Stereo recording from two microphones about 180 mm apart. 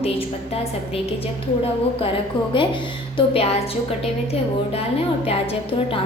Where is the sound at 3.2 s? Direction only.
35° left (ahead or behind).